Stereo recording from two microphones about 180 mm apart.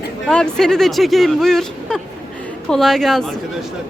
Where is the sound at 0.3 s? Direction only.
5° left (ahead or behind).